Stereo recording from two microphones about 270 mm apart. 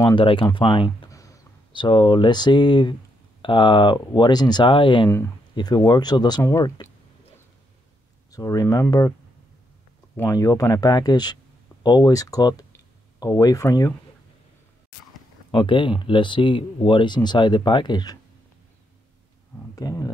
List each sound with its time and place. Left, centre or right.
0.0 s speech: centre
8.3 s speech: centre
10.1 s speech: centre
15.5 s speech: centre
19.7 s speech: centre